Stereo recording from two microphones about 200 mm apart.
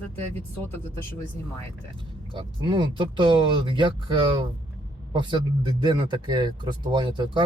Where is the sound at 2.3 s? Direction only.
25° right (ahead or behind).